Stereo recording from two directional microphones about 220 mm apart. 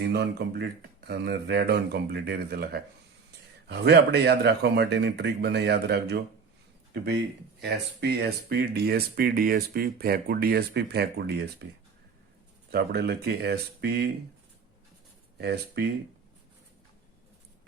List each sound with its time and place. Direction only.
0.0 s speech: 50° right (ahead or behind)
7.6 s speech: 45° right (ahead or behind)
12.7 s speech: 45° right (ahead or behind)
15.4 s speech: 50° right (ahead or behind)